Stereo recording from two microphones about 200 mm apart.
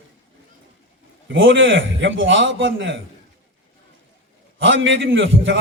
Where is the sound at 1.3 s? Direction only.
70° right (ahead or behind).